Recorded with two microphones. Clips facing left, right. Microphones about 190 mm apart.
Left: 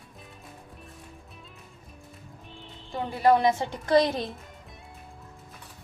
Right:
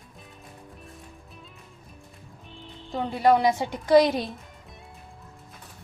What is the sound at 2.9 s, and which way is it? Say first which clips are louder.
A woman's voice: right 1 dB; 20° right (ahead or behind).